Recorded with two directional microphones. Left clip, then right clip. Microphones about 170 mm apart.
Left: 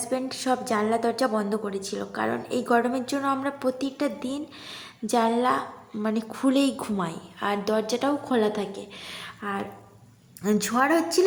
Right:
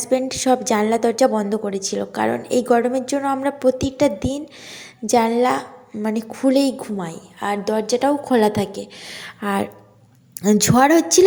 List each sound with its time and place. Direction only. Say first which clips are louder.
0.0 s a woman's voice: right 9 dB; 25° right (ahead or behind)
9.4 s a woman's voice: right 9 dB; 40° right (ahead or behind)